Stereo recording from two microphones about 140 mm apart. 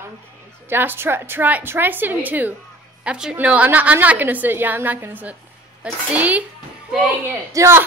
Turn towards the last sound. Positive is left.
turn(degrees=-20)  # may be behind; listen again after turning